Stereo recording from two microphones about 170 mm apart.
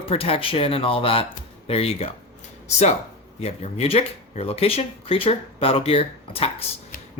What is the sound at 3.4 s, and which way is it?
Speech, 35° left (ahead or behind).